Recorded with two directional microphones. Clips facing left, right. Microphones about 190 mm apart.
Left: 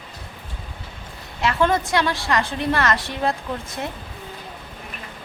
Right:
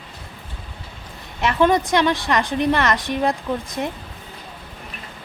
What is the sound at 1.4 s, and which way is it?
A woman's voice, 20° right (ahead or behind).